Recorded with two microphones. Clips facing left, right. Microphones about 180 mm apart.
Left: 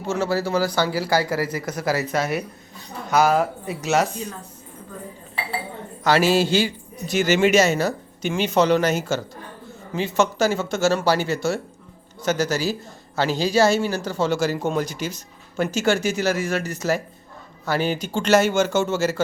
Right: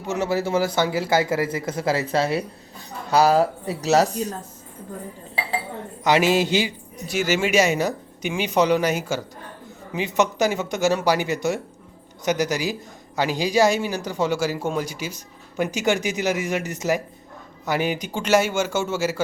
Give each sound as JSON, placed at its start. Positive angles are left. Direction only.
{"t": 0.1, "sound": "speech", "side_deg": -20}
{"t": 6.1, "sound": "speech", "side_deg": -20}